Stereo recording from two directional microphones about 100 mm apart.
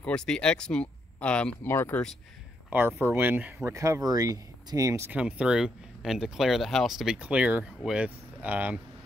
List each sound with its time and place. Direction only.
0.0 s speech: 5° left (ahead or behind)
3.0 s speech: 20° right (ahead or behind)
3.6 s speech: 30° right (ahead or behind)
5.1 s speech: 10° right (ahead or behind)